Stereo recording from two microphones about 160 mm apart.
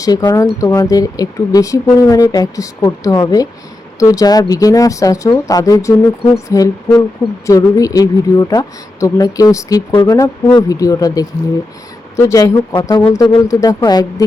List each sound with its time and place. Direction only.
0.0 s a woman's voice: 25° left (ahead or behind)